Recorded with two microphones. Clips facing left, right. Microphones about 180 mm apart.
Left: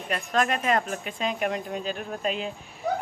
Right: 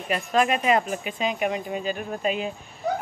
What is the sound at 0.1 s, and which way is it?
Speech, 5° right (ahead or behind).